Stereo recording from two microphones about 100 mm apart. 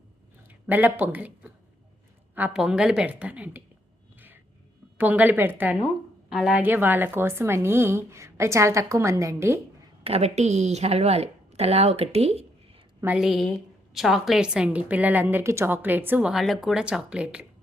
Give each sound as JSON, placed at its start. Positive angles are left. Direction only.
{"t": 0.4, "sound": "a woman's voice", "side_deg": -15}
{"t": 2.6, "sound": "a woman's voice", "side_deg": -5}
{"t": 4.9, "sound": "a woman's voice", "side_deg": -15}
{"t": 6.3, "sound": "a woman's voice", "side_deg": -5}
{"t": 6.6, "sound": "a woman's voice", "side_deg": -20}
{"t": 10.0, "sound": "speech", "side_deg": -90}
{"t": 13.1, "sound": "a woman's voice", "side_deg": 0}
{"t": 16.2, "sound": "a woman's voice", "side_deg": 0}